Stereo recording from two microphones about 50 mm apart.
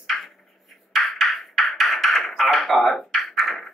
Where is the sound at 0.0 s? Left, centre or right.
Centre.